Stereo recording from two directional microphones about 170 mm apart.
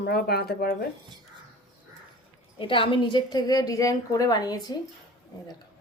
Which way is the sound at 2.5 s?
30° left (ahead or behind).